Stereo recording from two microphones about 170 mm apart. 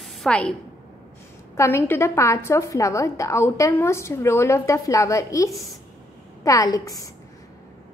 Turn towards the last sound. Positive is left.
turn(degrees=20)  # may be behind; listen again after turning